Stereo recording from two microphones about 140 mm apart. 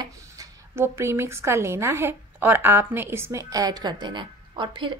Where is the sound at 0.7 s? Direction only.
15° right (ahead or behind).